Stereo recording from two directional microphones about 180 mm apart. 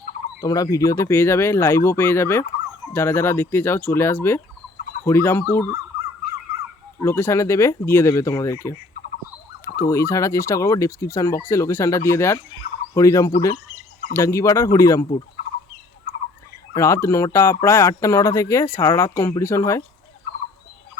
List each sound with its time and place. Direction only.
0.4 s speech: 20° left (ahead or behind)
7.0 s speech: 15° left (ahead or behind)
12.9 s a sound: 20° left (ahead or behind)
14.1 s speech: 15° left (ahead or behind)
16.7 s speech: 15° left (ahead or behind)